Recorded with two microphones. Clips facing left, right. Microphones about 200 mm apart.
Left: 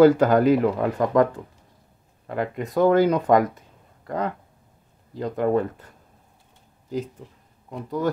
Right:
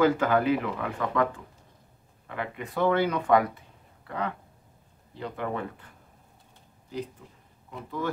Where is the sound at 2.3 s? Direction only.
40° left (ahead or behind).